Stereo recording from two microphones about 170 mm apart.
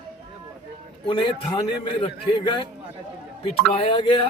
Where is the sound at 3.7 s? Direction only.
30° left (ahead or behind).